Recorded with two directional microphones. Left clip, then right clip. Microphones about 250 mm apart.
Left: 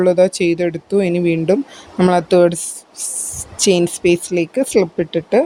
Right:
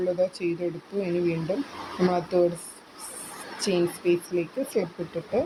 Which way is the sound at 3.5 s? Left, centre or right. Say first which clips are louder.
Left 11 dB; left.